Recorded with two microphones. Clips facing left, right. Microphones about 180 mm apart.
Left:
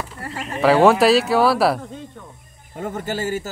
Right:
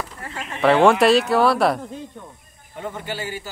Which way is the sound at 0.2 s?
35° left (ahead or behind).